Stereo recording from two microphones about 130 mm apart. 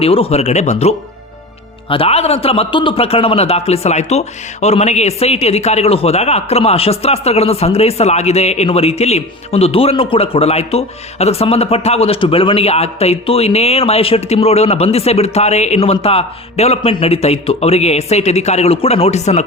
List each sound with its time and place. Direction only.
0.0 s a man's voice: 50° left (ahead or behind)